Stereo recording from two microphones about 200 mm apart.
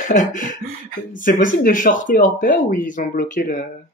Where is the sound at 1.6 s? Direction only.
40° left (ahead or behind).